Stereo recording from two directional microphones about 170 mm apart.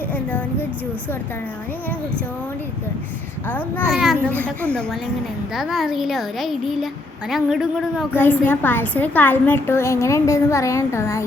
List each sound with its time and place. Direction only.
3.5 s a woman's voice: 10° left (ahead or behind)
3.9 s a child's voice: centre (ahead or behind)
4.3 s a woman's voice: 10° left (ahead or behind)
5.5 s a child's voice: centre (ahead or behind)
8.1 s a woman's voice: 10° left (ahead or behind)